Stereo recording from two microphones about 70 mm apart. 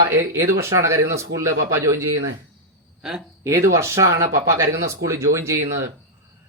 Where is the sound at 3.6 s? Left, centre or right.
Right.